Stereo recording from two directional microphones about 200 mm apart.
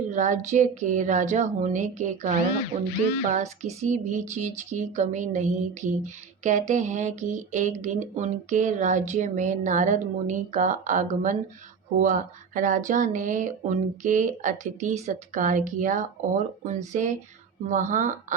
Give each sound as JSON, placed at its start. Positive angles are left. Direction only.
{"t": 0.1, "sound": "speech", "side_deg": -40}